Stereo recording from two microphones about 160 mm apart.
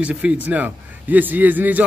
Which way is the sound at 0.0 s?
10° right (ahead or behind).